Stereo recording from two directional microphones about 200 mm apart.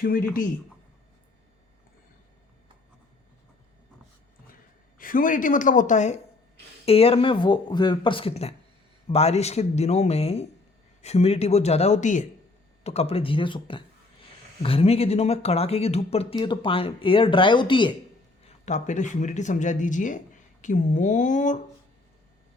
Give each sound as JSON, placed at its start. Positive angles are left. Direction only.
{"t": 0.0, "sound": "a man's voice", "side_deg": 45}
{"t": 4.9, "sound": "speech", "side_deg": 45}
{"t": 18.4, "sound": "speech", "side_deg": 35}